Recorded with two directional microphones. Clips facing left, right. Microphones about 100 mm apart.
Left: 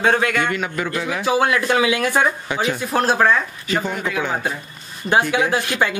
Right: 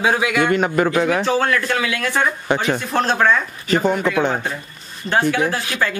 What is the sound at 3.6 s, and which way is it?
Speech, 45° right (ahead or behind).